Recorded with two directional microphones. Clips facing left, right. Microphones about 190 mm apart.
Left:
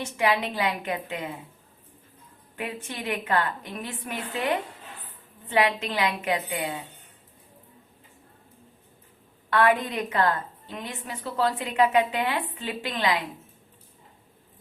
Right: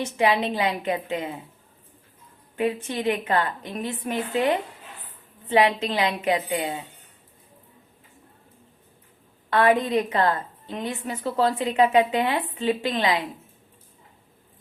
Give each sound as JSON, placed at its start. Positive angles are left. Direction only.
{"t": 0.0, "sound": "a woman's voice", "side_deg": -25}
{"t": 2.6, "sound": "a woman's voice", "side_deg": -30}
{"t": 5.5, "sound": "a woman's voice", "side_deg": -25}
{"t": 9.5, "sound": "a woman's voice", "side_deg": -25}